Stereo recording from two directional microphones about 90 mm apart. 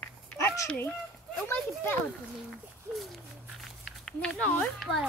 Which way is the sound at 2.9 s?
Centre (ahead or behind).